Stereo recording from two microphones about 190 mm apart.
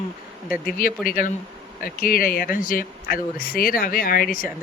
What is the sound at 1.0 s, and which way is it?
Speech, 45° left (ahead or behind).